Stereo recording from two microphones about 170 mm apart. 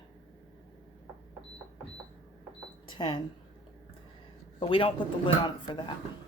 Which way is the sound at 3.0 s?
30° left (ahead or behind).